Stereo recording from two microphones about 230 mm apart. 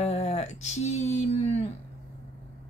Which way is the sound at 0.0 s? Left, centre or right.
Left.